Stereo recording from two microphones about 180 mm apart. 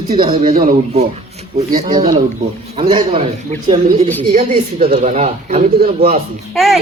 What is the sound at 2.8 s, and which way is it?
Speech, 30° right (ahead or behind).